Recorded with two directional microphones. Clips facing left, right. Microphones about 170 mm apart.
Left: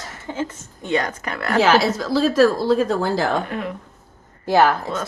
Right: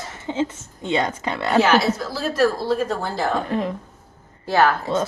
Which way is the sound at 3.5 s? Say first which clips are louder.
Right 4 dB; 35° right (ahead or behind).